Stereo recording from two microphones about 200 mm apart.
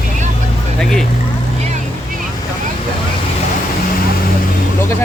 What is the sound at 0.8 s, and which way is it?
Speech, centre (ahead or behind).